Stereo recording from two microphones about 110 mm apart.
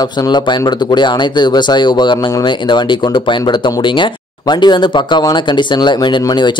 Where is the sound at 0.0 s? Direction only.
40° left (ahead or behind).